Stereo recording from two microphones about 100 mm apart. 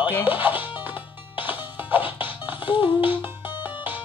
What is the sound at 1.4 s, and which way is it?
Music, 20° right (ahead or behind).